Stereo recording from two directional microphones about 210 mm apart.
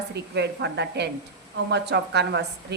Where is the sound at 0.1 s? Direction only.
55° right (ahead or behind).